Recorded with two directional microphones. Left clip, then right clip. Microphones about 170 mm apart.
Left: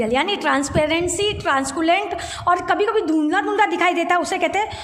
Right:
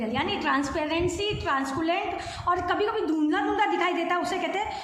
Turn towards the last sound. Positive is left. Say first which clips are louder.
# left 8 dB
turn(degrees=55)  # may be behind; listen again after turning